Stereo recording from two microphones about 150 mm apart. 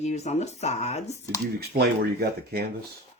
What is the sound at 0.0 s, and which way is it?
Speech, 50° left (ahead or behind).